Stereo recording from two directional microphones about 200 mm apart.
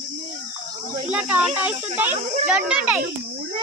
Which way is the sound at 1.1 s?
5° right (ahead or behind).